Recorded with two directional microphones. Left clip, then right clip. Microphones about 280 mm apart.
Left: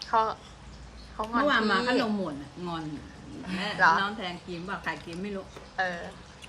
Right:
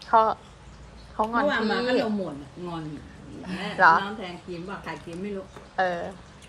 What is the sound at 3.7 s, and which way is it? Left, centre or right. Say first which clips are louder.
A woman's voice: right 4 dB; centre.